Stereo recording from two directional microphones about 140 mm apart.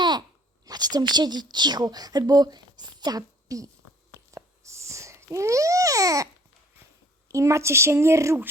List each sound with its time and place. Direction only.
0.0 s a sound: 30° right (ahead or behind)
4.4 s babbling: 20° right (ahead or behind)
7.3 s a woman's voice: 20° right (ahead or behind)